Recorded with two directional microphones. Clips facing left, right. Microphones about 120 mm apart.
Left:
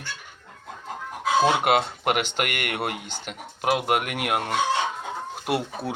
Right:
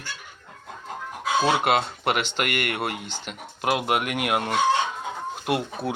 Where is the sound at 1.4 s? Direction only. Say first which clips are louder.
Left 1 dB; 10° left (ahead or behind).